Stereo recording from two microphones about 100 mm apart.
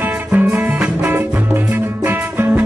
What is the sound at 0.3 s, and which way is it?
Music, 20° right (ahead or behind).